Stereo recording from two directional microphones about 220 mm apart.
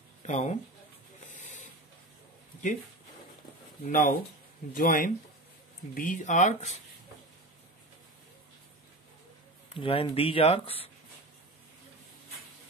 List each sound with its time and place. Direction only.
0.3 s speech: 30° left (ahead or behind)
1.3 s a sound: 35° left (ahead or behind)
3.8 s speech: 35° left (ahead or behind)
9.8 s speech: 25° left (ahead or behind)